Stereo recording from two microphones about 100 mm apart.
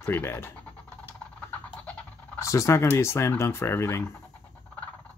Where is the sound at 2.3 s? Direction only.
30° left (ahead or behind).